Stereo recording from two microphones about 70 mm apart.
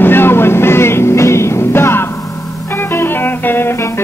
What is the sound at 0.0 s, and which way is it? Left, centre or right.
Music, left.